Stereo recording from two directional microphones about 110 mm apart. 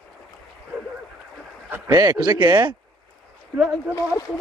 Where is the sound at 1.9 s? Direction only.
40° right (ahead or behind).